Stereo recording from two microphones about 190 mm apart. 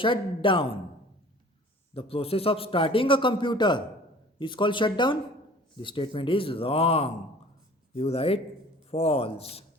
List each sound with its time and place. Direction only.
0.0 s a man's voice: 25° left (ahead or behind)
1.9 s a man's voice: 30° left (ahead or behind)